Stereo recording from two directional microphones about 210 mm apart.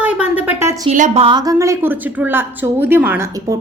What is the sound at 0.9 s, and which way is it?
A woman's voice, 35° right (ahead or behind).